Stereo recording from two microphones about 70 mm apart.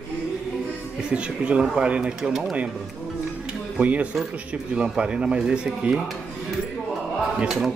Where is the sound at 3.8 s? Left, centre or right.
Centre.